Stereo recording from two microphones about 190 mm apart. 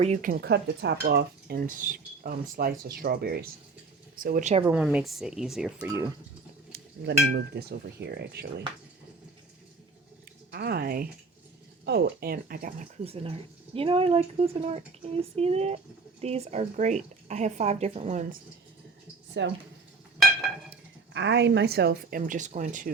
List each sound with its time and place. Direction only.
0.0 s speech: 40° right (ahead or behind)
4.6 s speech: 5° right (ahead or behind)
6.7 s speech: 65° right (ahead or behind)
10.5 s speech: 55° right (ahead or behind)
13.1 s speech: 30° right (ahead or behind)
19.4 s speech: 70° right (ahead or behind)
21.1 s speech: 70° right (ahead or behind)
22.3 s speech: 40° right (ahead or behind)